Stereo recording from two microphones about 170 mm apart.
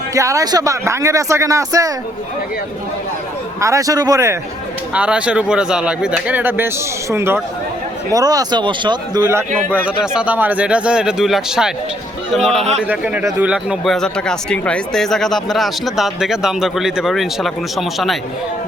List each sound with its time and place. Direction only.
0.1 s speech: 20° right (ahead or behind)
3.6 s speech: 20° right (ahead or behind)
4.9 s speech: 5° right (ahead or behind); by 9.2 s 25° right (ahead or behind)
9.7 s speech: 5° right (ahead or behind)